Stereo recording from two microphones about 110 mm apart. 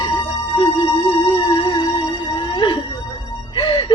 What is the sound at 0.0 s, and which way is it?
Music, 40° left (ahead or behind).